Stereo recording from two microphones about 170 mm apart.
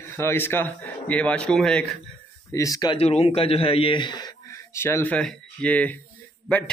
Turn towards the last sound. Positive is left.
turn(degrees=5)  # may be behind; listen again after turning